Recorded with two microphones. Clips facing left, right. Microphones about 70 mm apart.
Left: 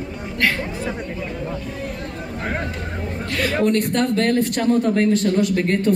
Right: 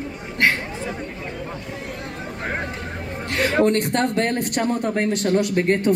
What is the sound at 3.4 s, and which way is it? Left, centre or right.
Music, right.